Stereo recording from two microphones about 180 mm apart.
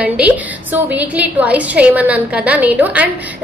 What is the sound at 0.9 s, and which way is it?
A woman's voice, 10° right (ahead or behind).